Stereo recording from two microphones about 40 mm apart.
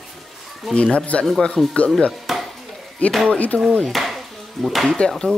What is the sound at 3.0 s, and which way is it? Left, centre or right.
Speech, left.